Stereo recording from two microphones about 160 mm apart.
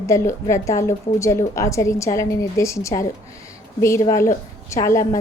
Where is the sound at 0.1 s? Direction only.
20° left (ahead or behind).